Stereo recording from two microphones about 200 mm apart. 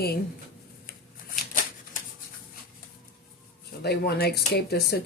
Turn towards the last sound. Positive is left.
turn(degrees=50)  # may be behind; listen again after turning